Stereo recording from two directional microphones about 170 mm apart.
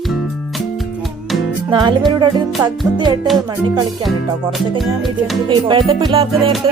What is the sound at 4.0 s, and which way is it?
Music, centre (ahead or behind).